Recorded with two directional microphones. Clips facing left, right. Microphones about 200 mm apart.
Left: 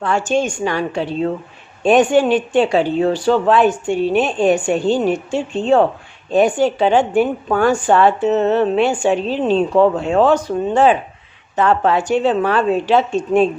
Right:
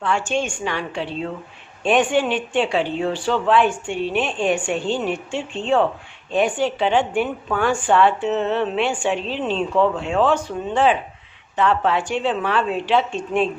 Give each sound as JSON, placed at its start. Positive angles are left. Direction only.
{"t": 0.0, "sound": "a woman's voice", "side_deg": 40}